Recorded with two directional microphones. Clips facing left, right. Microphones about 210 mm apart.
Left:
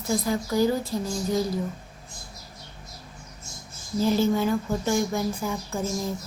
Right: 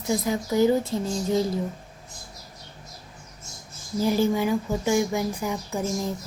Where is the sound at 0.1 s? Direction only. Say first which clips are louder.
Right 1 dB; 20° right (ahead or behind).